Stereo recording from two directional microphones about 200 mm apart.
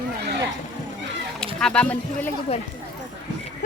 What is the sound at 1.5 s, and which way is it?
Speech, 5° left (ahead or behind).